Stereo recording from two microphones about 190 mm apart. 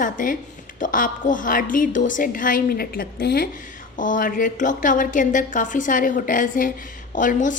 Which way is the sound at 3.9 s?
45° left (ahead or behind).